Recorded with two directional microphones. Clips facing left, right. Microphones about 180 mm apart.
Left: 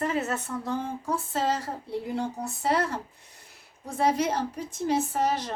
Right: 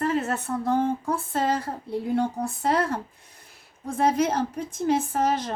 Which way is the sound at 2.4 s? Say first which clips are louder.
Right 2 dB; 55° right (ahead or behind).